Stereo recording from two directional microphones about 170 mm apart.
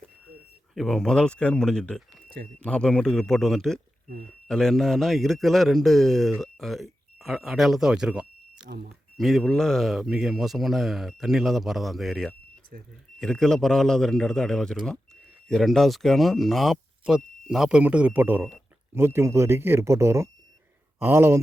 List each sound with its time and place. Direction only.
0.7 s speech: centre (ahead or behind); by 21.4 s 15° right (ahead or behind)